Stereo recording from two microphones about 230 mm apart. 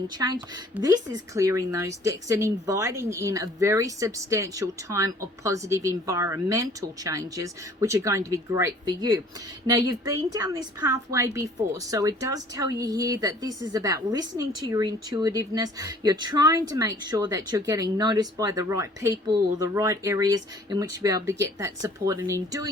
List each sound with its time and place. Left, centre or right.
0.8 s a woman's voice: centre